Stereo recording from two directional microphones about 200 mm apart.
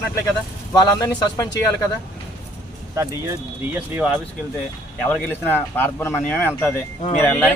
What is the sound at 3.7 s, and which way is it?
Speech, 5° right (ahead or behind).